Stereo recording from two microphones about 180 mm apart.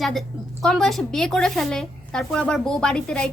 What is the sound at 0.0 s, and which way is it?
A woman's voice, centre (ahead or behind).